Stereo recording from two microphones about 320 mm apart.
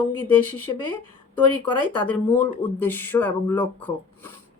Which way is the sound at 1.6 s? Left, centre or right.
Centre.